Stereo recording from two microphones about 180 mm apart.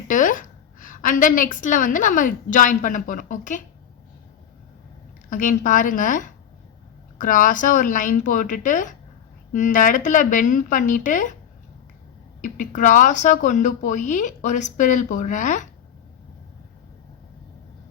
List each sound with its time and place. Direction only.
0.1 s a sound: 45° left (ahead or behind)
1.6 s speech: 45° left (ahead or behind)
5.3 s speech: 45° left (ahead or behind)
12.4 s speech: 45° left (ahead or behind)